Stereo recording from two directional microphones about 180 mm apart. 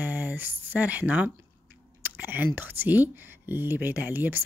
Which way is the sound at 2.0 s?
10° right (ahead or behind).